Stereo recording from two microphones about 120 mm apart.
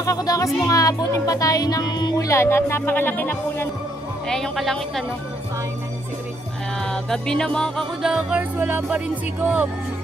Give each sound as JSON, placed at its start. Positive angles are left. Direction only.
{"t": 0.0, "sound": "speech", "side_deg": 30}
{"t": 2.2, "sound": "speech", "side_deg": 20}
{"t": 4.3, "sound": "speech", "side_deg": 5}
{"t": 6.8, "sound": "music", "side_deg": 5}